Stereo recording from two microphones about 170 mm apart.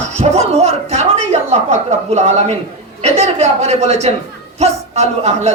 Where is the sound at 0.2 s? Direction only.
40° right (ahead or behind).